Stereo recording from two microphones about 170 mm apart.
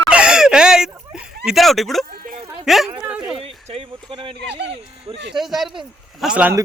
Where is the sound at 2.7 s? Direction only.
Centre (ahead or behind).